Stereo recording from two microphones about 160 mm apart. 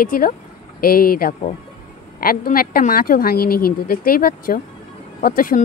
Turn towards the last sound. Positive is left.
turn(degrees=60)  # may be behind; listen again after turning